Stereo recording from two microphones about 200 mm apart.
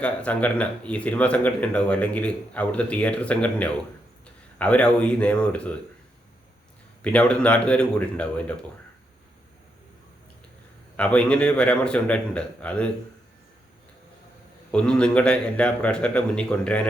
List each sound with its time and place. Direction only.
0.0 s speech: 5° left (ahead or behind)
7.0 s a man's voice: 5° left (ahead or behind)
10.9 s a man's voice: 5° left (ahead or behind)
14.7 s a man's voice: 5° left (ahead or behind)